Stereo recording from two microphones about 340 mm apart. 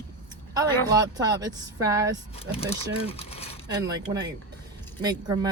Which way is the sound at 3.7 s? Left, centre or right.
Centre.